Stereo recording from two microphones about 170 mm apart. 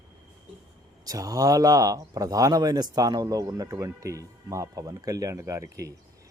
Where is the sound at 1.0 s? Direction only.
20° right (ahead or behind).